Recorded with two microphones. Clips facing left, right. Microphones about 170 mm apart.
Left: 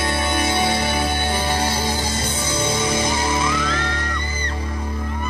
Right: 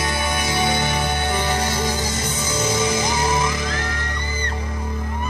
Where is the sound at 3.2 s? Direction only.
20° right (ahead or behind).